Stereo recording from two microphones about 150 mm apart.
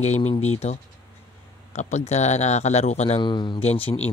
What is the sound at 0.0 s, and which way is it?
Speech, 45° left (ahead or behind).